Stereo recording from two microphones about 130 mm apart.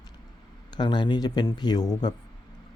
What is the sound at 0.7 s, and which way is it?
Speech, 35° left (ahead or behind).